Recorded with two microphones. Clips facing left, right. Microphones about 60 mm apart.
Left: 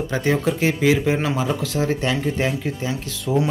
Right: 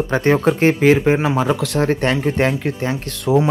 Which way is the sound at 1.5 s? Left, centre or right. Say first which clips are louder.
Right 4 dB; right.